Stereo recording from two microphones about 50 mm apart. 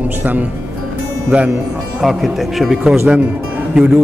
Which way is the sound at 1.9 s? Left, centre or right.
Centre.